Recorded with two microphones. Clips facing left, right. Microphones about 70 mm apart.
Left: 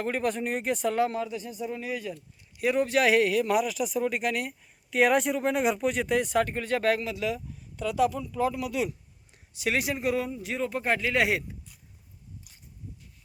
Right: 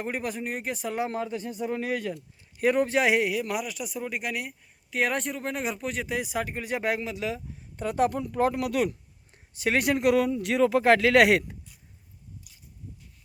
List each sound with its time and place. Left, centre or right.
0.0 s speech: centre
1.1 s speech: right
2.9 s speech: right
3.2 s speech: centre; by 8.1 s right
8.1 s speech: right
9.3 s speech: right
12.5 s a sound: left